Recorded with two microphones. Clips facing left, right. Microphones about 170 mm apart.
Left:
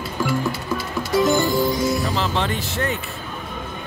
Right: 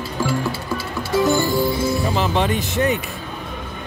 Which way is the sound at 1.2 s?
20° left (ahead or behind).